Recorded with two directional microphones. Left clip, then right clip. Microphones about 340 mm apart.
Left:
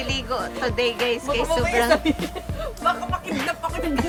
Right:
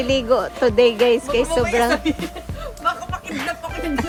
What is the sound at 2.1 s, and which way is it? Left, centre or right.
Speech, left.